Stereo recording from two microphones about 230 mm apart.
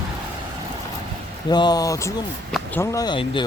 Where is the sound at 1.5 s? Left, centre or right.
Centre.